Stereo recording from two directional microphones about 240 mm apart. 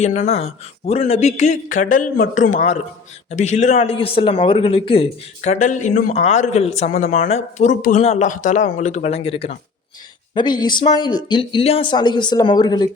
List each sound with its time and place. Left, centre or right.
0.0 s a man's voice: left